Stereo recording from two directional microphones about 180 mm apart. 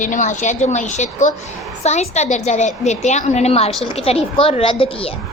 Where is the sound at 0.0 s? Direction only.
45° left (ahead or behind).